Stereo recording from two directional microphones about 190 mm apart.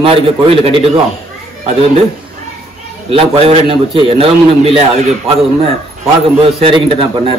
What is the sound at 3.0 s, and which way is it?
A man's voice, 30° right (ahead or behind).